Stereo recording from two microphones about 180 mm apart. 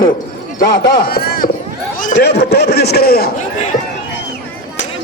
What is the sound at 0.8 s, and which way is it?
Speech, 60° left (ahead or behind).